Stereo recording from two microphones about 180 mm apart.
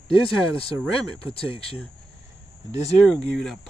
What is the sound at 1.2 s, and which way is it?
Speech, 30° left (ahead or behind).